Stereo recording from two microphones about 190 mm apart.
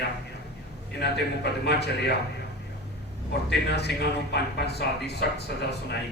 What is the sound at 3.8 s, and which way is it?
Speech, 60° left (ahead or behind).